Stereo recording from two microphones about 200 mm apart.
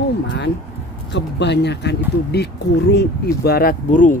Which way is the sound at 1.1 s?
60° left (ahead or behind).